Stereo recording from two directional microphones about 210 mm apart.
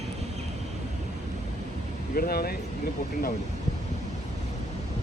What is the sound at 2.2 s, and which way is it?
Speech, 45° left (ahead or behind).